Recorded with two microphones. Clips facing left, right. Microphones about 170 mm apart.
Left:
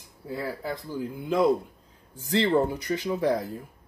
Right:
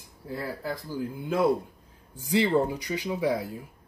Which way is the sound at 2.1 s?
10° right (ahead or behind).